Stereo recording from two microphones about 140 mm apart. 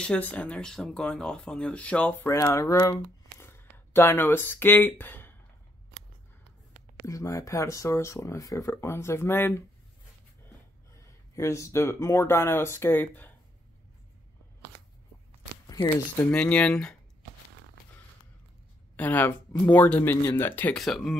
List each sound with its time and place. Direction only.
0.0 s speech: 10° left (ahead or behind)
7.1 s speech: 25° left (ahead or behind)
11.0 s speech: 20° left (ahead or behind)
15.6 s shuffling cards: 30° left (ahead or behind)
16.3 s speech: 5° left (ahead or behind)
18.9 s speech: 10° left (ahead or behind)
20.7 s speech: centre (ahead or behind)